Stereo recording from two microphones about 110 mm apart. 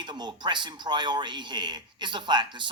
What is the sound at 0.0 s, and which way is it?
Speech, 45° right (ahead or behind).